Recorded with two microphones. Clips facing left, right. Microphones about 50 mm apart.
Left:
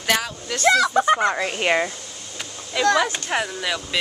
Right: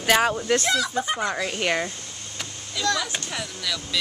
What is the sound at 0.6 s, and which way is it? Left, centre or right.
Speech, left.